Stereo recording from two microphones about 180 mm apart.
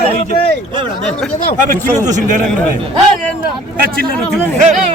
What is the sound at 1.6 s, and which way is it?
Speech, 45° right (ahead or behind).